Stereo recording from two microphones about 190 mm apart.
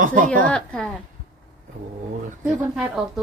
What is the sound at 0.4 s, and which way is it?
Speech, 5° left (ahead or behind).